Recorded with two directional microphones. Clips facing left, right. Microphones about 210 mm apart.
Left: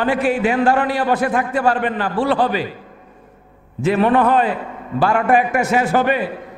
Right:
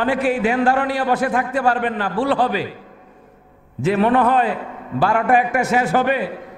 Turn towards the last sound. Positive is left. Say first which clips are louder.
# left 1 dB
turn(degrees=15)  # may be behind; listen again after turning